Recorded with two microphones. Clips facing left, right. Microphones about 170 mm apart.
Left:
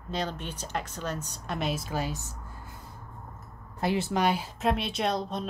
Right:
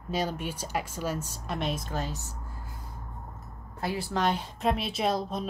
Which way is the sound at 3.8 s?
20° left (ahead or behind).